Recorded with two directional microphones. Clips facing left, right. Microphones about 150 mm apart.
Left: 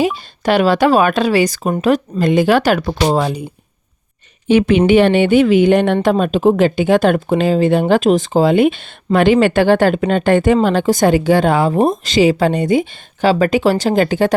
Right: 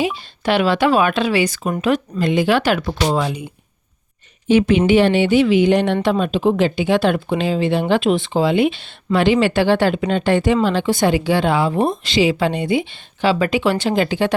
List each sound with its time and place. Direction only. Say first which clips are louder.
0.0 s speech: left 4 dB; 45° left (ahead or behind)
4.4 s a woman's voice: left 3 dB; 60° left (ahead or behind); by 14.3 s 45° left (ahead or behind)